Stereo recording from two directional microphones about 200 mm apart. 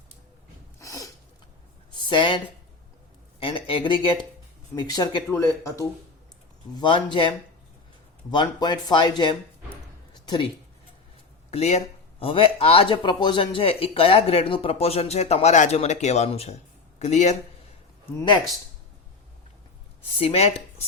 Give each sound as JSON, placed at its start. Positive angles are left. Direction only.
{"t": 0.8, "sound": "a sound", "side_deg": 15}
{"t": 2.0, "sound": "speech", "side_deg": 25}
{"t": 3.4, "sound": "speech", "side_deg": 25}
{"t": 11.5, "sound": "speech", "side_deg": 35}
{"t": 20.1, "sound": "speech", "side_deg": 30}